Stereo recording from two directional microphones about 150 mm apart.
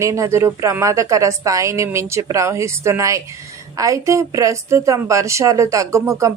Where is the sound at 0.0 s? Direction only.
20° right (ahead or behind).